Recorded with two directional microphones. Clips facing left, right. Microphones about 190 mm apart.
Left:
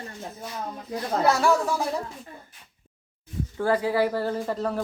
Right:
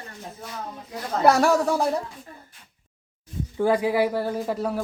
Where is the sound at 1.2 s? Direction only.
50° right (ahead or behind).